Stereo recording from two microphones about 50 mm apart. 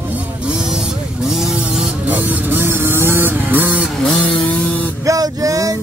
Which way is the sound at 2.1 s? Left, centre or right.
Right.